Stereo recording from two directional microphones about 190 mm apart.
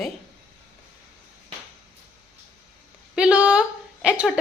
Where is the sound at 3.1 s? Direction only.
5° right (ahead or behind).